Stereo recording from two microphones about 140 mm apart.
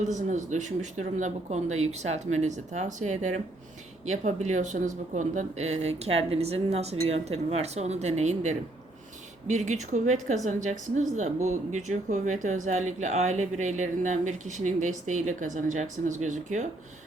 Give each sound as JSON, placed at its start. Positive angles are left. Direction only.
{"t": 0.0, "sound": "speech", "side_deg": -60}